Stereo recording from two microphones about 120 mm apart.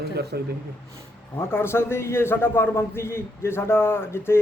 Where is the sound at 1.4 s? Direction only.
20° left (ahead or behind).